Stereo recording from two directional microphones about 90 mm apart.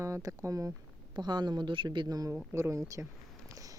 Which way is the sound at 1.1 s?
55° right (ahead or behind).